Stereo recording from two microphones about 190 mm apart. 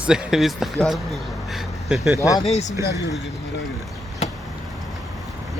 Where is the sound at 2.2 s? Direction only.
20° left (ahead or behind).